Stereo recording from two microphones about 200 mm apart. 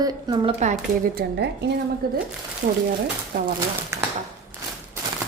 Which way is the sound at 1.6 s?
60° right (ahead or behind).